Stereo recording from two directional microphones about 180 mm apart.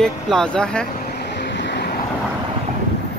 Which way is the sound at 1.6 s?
70° left (ahead or behind).